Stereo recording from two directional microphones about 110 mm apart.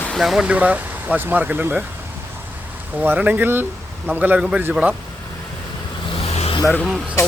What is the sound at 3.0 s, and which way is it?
Speech, 15° right (ahead or behind).